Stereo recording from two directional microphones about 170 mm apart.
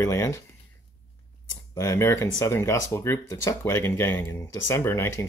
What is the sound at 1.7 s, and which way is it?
Speech, 20° left (ahead or behind).